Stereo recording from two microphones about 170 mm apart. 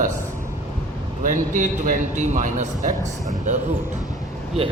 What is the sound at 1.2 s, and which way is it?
Speech, 50° right (ahead or behind).